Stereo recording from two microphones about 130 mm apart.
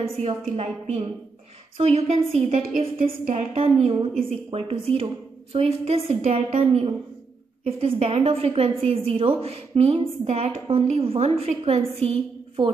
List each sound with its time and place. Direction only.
0.2 s a woman's voice: 55° right (ahead or behind)
3.0 s a woman's voice: 90° right
3.5 s a woman's voice: 45° right (ahead or behind)